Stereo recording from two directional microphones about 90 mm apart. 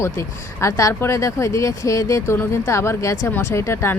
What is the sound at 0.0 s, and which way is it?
Speech, 30° left (ahead or behind).